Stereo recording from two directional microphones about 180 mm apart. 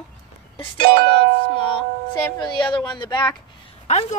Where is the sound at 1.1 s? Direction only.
30° left (ahead or behind).